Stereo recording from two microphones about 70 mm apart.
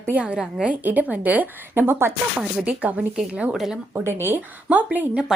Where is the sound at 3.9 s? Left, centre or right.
Right.